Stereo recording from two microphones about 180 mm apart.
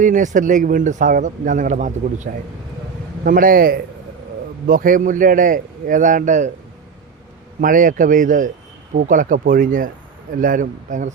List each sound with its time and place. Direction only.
0.0 s speech: 45° right (ahead or behind)
7.6 s speech: 50° right (ahead or behind)